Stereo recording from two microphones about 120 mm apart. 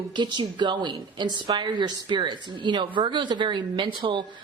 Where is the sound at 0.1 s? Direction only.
40° right (ahead or behind).